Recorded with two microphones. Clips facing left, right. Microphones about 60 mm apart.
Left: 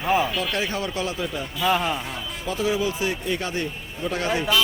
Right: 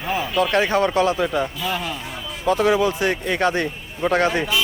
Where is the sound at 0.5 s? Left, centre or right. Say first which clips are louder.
Right 9 dB; right.